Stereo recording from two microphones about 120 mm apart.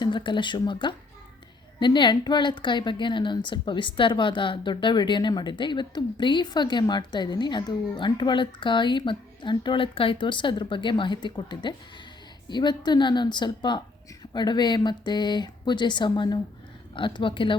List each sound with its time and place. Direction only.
0.0 s a woman's voice: 40° left (ahead or behind)